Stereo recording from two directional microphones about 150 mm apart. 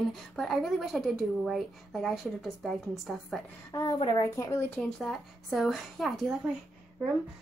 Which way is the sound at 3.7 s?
25° left (ahead or behind).